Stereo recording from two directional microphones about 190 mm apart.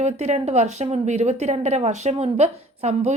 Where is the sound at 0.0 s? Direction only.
35° right (ahead or behind).